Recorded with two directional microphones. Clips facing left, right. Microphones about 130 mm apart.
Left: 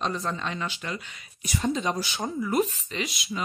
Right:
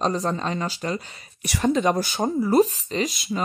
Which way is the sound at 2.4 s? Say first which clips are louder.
Right 7 dB; 35° right (ahead or behind).